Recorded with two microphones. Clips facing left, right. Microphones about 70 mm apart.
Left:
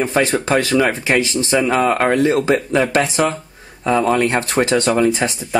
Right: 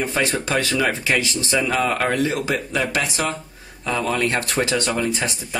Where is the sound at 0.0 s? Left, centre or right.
Left.